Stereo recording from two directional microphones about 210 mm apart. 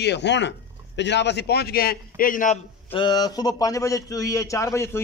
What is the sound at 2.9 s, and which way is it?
A man's voice, 20° left (ahead or behind).